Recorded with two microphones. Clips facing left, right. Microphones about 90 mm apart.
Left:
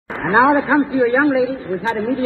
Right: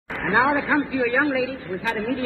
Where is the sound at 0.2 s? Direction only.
40° left (ahead or behind).